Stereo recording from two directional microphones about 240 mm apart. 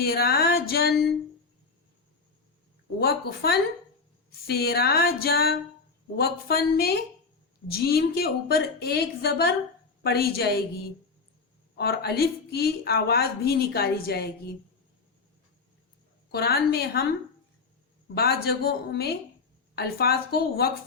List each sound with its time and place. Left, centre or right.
0.0 s a woman's voice: left
3.0 s a woman's voice: left
11.8 s a woman's voice: left
16.3 s a woman's voice: left
18.1 s a woman's voice: left